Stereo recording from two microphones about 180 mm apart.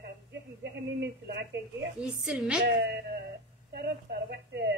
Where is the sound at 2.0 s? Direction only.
5° right (ahead or behind).